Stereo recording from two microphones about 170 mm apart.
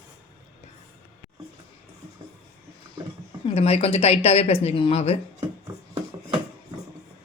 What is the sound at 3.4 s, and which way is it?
A woman's voice, 35° left (ahead or behind).